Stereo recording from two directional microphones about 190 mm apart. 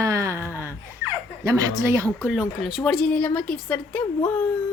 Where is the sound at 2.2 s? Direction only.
5° right (ahead or behind).